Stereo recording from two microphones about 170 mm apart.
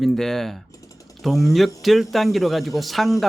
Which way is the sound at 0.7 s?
20° left (ahead or behind).